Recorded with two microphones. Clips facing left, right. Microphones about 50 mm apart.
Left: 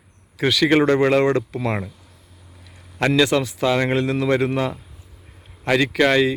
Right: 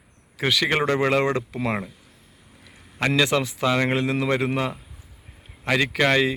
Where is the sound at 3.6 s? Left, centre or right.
Centre.